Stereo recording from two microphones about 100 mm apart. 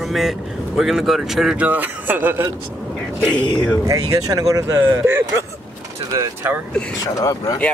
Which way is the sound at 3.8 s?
35° right (ahead or behind).